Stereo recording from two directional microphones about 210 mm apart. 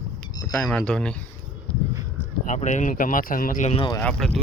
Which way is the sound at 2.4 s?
35° left (ahead or behind).